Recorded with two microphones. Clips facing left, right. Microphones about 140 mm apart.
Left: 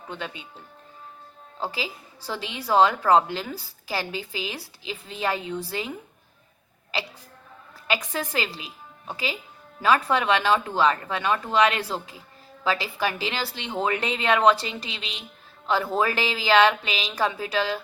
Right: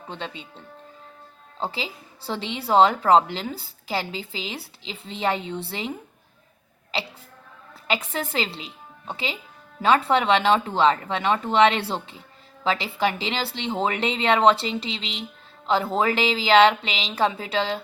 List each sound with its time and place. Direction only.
0.1 s a woman's voice: 25° right (ahead or behind)
1.5 s a woman's voice: 25° right (ahead or behind)
7.9 s a woman's voice: 25° right (ahead or behind)